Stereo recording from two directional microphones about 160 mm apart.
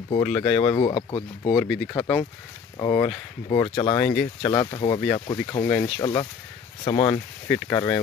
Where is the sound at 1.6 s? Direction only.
5° left (ahead or behind); by 4.0 s 30° left (ahead or behind).